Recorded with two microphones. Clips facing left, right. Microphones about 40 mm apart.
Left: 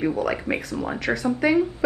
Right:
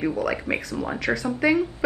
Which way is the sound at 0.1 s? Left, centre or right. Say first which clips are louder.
Left 1 dB; centre.